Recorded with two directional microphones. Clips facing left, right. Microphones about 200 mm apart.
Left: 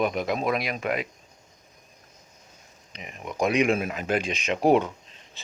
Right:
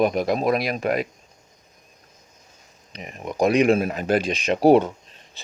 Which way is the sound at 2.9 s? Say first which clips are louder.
Right 4 dB; 40° right (ahead or behind).